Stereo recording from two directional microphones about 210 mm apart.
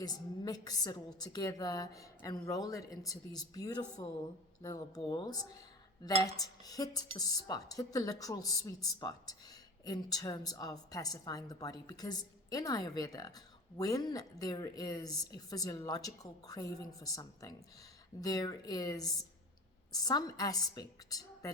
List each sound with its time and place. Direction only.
0.0 s a woman's voice: 20° left (ahead or behind)